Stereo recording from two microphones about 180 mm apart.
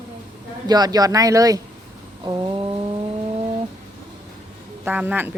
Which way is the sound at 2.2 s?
25° right (ahead or behind).